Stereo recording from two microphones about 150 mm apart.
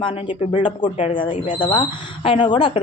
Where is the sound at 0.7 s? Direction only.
55° left (ahead or behind).